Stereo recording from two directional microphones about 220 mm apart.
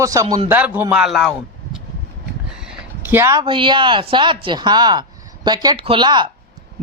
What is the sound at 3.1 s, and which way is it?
Speech, 10° right (ahead or behind).